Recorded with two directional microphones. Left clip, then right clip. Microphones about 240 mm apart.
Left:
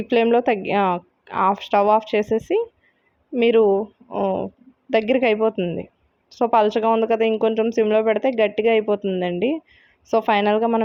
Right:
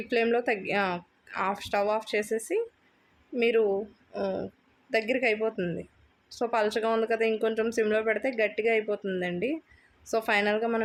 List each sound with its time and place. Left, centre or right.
0.1 s speech: left